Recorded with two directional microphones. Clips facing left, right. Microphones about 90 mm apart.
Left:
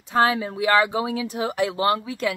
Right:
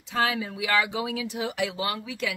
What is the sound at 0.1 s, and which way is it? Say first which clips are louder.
Speech: left 6 dB; 40° left (ahead or behind).